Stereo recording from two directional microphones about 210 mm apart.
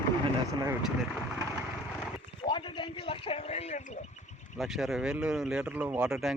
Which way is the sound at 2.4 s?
20° left (ahead or behind).